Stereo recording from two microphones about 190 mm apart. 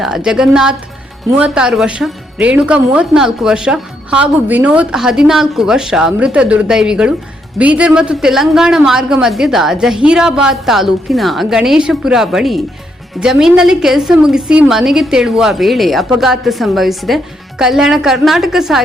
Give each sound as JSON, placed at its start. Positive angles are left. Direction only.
{"t": 0.0, "sound": "speech", "side_deg": -5}